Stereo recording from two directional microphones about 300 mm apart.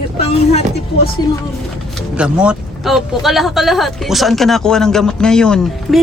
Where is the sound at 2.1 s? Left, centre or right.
Centre.